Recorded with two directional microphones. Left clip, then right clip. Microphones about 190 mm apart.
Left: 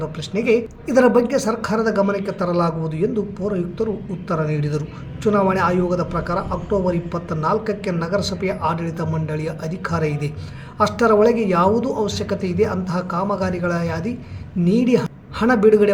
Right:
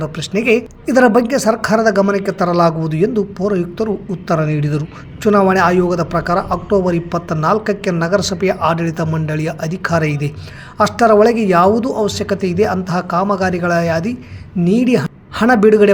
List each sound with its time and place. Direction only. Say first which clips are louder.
0.0 s a man's voice: right 5 dB; 45° right (ahead or behind)